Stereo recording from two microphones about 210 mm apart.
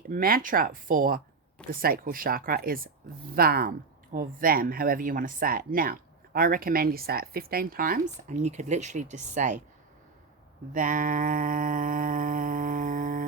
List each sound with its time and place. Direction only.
0.1 s speech: 40° right (ahead or behind)
10.8 s speech: 40° right (ahead or behind)